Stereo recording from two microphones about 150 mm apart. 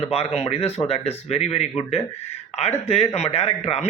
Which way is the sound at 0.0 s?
40° left (ahead or behind).